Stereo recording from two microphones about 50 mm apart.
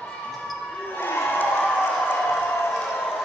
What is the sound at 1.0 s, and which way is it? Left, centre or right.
Crowd, left.